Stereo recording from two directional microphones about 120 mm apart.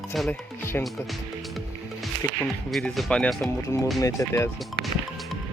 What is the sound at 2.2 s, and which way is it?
Speech, 25° left (ahead or behind).